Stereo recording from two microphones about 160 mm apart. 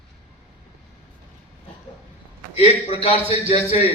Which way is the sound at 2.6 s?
40° left (ahead or behind).